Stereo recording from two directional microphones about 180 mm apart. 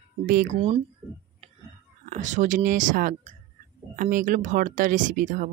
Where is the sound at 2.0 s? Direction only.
40° right (ahead or behind).